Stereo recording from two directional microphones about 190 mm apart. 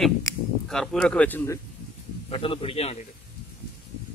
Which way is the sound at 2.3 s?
30° left (ahead or behind).